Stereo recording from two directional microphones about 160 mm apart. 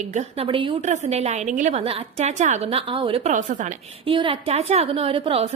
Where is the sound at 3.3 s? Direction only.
50° right (ahead or behind).